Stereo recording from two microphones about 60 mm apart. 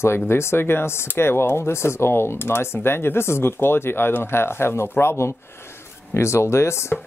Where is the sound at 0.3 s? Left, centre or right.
Left.